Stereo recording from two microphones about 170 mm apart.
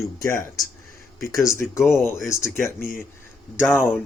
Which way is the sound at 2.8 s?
60° left (ahead or behind).